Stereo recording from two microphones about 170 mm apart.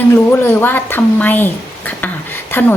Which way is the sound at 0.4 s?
10° left (ahead or behind).